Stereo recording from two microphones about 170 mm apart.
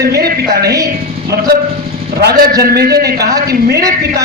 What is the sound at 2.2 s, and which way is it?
A woman's voice, 65° right (ahead or behind).